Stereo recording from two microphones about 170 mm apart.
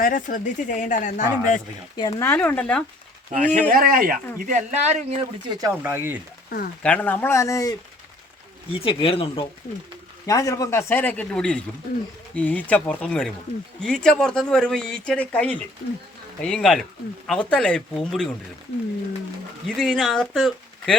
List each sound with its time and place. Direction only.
0.0 s speech: 55° left (ahead or behind)
2.0 s speech: 25° left (ahead or behind)
2.2 s speech: 10° left (ahead or behind)
3.5 s speech: 55° right (ahead or behind)
5.5 s speech: 20° right (ahead or behind)
6.8 s speech: 10° left (ahead or behind)
8.7 s speech: 30° left (ahead or behind)
10.2 s speech: 20° left (ahead or behind); by 18.3 s 5° left (ahead or behind)
19.6 s speech: 5° left (ahead or behind)